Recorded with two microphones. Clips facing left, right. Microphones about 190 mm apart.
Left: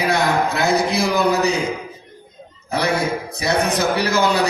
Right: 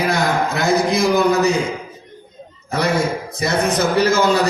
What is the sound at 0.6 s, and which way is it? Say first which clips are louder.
Speech: right 2 dB; 60° left (ahead or behind).